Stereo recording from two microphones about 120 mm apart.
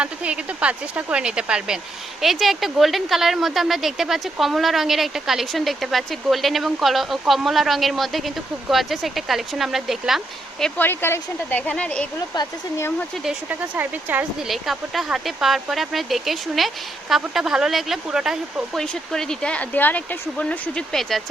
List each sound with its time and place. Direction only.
0.0 s speech: 10° right (ahead or behind)
10.8 s speech: 20° left (ahead or behind)
12.3 s speech: 35° left (ahead or behind)
13.2 s speech: 15° right (ahead or behind)
14.3 s speech: centre (ahead or behind)